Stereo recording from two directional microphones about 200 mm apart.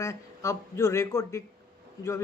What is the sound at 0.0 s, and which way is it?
Speech, 15° left (ahead or behind).